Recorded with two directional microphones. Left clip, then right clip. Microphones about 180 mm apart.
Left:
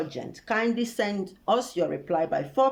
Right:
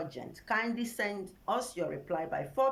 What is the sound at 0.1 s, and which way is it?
Speech, 15° left (ahead or behind).